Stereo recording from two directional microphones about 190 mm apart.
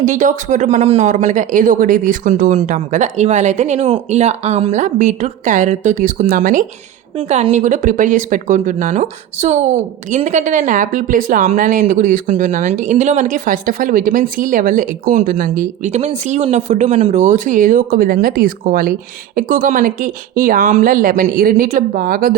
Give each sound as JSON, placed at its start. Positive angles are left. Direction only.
{"t": 0.0, "sound": "speech", "side_deg": -40}
{"t": 7.2, "sound": "speech", "side_deg": -35}